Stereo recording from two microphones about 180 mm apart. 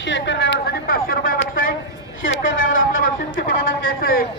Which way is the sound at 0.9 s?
55° left (ahead or behind).